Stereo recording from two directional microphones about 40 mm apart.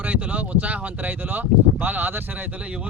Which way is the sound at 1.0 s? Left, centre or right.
Right.